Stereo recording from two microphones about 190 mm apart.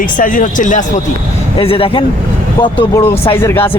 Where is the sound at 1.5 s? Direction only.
30° left (ahead or behind).